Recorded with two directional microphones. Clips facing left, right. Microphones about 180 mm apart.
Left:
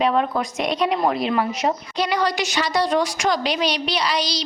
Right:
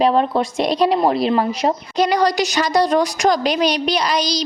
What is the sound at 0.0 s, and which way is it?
A woman's voice, 30° right (ahead or behind).